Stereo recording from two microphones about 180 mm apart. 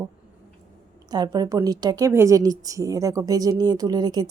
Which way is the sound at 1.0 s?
20° right (ahead or behind).